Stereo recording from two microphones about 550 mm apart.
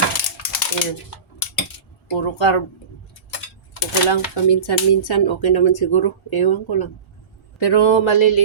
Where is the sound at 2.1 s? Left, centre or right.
Left.